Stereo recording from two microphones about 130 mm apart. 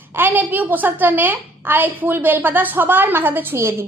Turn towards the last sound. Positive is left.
turn(degrees=-20)  # may be behind; listen again after turning